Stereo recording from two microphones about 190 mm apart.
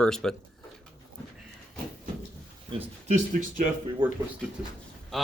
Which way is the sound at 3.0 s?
40° right (ahead or behind).